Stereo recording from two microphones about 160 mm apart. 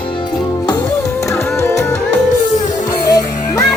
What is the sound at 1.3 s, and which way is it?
Music, 15° left (ahead or behind).